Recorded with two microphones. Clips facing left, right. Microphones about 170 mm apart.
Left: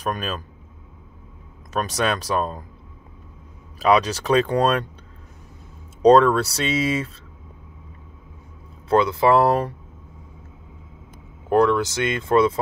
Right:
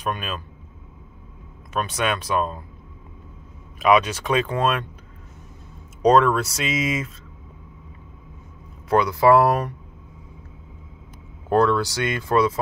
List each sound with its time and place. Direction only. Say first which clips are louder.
0.0 s speech: left 2 dB; 40° left (ahead or behind)
1.7 s speech: left 1 dB; 40° left (ahead or behind)
3.8 s speech: even; 35° left (ahead or behind)
6.0 s speech: left 3 dB; 30° left (ahead or behind)
8.8 s speech: even; 25° left (ahead or behind)
11.4 s speech: left 1 dB; 15° left (ahead or behind)